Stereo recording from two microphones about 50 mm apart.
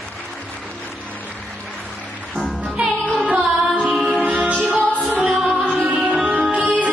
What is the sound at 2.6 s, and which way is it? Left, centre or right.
Music, right.